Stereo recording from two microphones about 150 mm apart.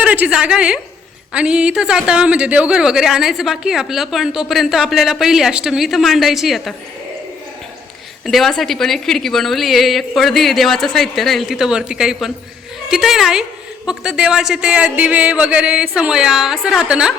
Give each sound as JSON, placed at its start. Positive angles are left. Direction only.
{"t": 0.0, "sound": "a woman's voice", "side_deg": -10}
{"t": 8.2, "sound": "speech", "side_deg": 0}